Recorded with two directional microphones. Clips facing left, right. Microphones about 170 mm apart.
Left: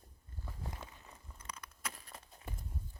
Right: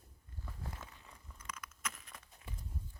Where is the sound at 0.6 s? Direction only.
20° left (ahead or behind).